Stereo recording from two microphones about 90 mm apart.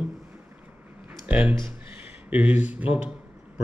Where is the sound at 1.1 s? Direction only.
15° right (ahead or behind).